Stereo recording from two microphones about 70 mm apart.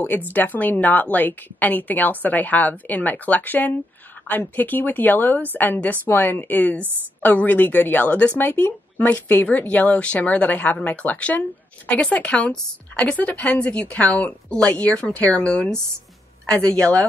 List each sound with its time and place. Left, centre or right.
0.0 s a woman's voice: left